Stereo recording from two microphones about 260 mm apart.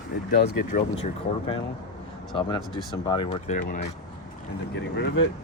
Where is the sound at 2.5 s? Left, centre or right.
Centre.